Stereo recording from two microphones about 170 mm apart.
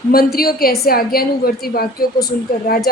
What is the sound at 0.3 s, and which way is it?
A woman's voice, 60° left (ahead or behind).